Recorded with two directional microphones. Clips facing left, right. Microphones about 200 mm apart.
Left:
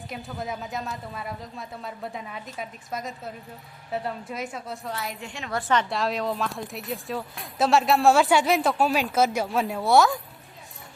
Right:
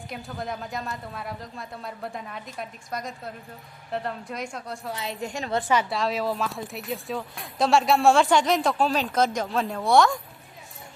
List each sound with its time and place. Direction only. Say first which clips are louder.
0.1 s speech: even; 5° left (ahead or behind)
5.2 s a woman's voice: right 6 dB; 40° right (ahead or behind)
5.5 s a woman's voice: right 1 dB; 15° right (ahead or behind)
5.9 s speech: even; centre (ahead or behind)